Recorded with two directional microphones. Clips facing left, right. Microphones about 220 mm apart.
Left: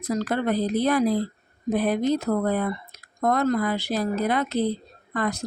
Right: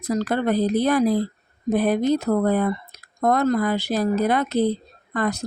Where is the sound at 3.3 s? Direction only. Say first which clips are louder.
Right 3 dB; 45° right (ahead or behind).